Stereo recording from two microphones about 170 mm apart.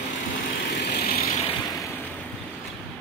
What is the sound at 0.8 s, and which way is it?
Vehicle, 70° left (ahead or behind).